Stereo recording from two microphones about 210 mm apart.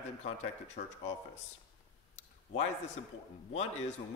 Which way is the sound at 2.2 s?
35° left (ahead or behind).